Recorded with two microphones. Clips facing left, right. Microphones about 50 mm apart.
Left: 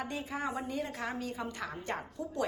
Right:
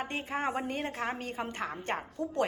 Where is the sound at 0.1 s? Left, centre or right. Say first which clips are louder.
Right 3 dB; right.